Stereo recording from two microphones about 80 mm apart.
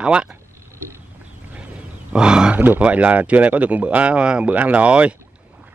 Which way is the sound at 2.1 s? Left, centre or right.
Centre.